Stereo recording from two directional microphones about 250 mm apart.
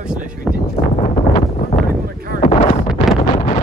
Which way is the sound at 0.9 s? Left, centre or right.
Left.